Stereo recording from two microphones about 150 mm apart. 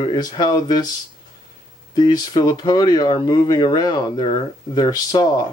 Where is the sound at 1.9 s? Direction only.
25° left (ahead or behind).